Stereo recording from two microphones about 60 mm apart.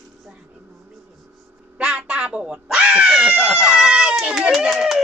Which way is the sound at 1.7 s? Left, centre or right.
Centre.